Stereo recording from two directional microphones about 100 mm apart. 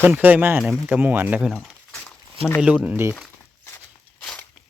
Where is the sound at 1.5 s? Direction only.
5° left (ahead or behind).